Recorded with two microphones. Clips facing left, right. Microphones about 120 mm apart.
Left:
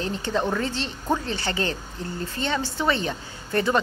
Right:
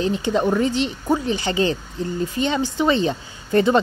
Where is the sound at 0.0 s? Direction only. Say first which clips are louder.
Right 6 dB; 15° right (ahead or behind).